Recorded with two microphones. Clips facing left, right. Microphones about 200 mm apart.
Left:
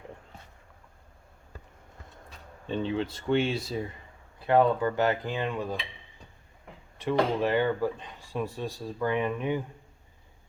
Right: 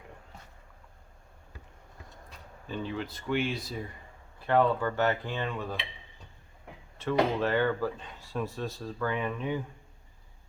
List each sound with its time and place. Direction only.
2.6 s speech: 25° left (ahead or behind)
4.4 s speech: 15° left (ahead or behind)
7.0 s speech: 15° left (ahead or behind)